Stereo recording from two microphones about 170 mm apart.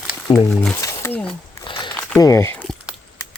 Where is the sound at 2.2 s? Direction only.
15° left (ahead or behind).